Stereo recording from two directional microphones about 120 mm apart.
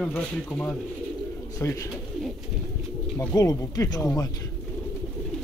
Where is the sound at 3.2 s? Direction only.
30° left (ahead or behind).